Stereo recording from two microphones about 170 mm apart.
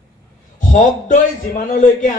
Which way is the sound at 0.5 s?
50° left (ahead or behind).